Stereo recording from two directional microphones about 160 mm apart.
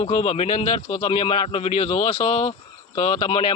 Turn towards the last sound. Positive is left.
turn(degrees=35)  # may be behind; listen again after turning